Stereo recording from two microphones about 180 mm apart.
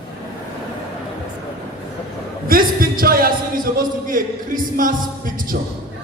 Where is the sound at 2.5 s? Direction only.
55° right (ahead or behind).